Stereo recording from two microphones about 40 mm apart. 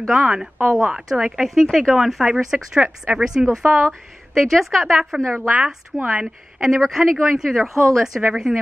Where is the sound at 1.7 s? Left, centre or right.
Centre.